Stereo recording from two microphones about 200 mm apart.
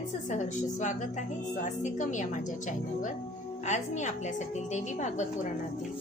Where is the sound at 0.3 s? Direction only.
40° left (ahead or behind).